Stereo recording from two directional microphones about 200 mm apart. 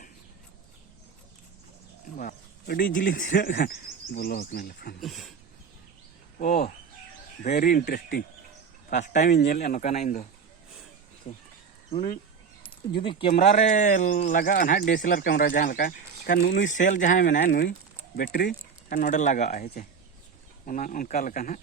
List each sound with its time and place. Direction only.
2.1 s speech: 45° left (ahead or behind)
3.5 s speech: 55° left (ahead or behind)
4.9 s speech: centre (ahead or behind)
6.4 s speech: 50° left (ahead or behind)
9.0 s speech: 35° left (ahead or behind)
9.3 s speech: 55° left (ahead or behind)
9.6 s speech: 40° left (ahead or behind)
11.3 s speech: 35° left (ahead or behind)
13.0 s speech: 25° left (ahead or behind); by 16.6 s 55° left (ahead or behind)
16.6 s speech: 40° left (ahead or behind)